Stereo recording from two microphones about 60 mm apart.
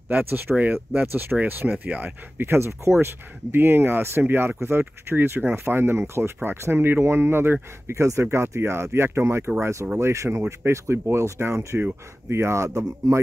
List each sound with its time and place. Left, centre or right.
0.1 s speech: right
2.3 s speech: right
7.8 s speech: right
9.6 s speech: right